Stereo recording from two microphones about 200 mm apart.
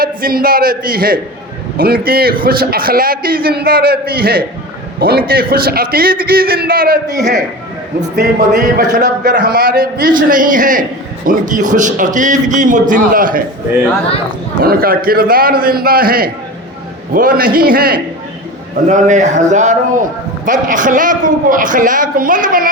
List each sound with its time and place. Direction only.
0.0 s a man's voice: 45° right (ahead or behind)
9.0 s a man's voice: 40° right (ahead or behind)
14.6 s a man's voice: 45° right (ahead or behind)